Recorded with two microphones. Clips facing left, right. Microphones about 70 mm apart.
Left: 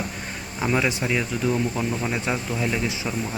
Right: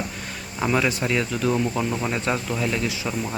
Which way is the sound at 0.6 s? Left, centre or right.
Centre.